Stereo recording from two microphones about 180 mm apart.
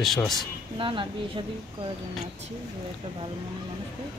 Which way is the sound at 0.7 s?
30° right (ahead or behind).